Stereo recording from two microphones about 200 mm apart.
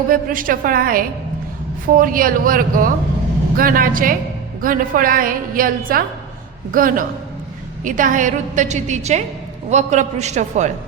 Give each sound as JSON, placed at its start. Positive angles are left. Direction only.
{"t": 0.1, "sound": "a woman's voice", "side_deg": -45}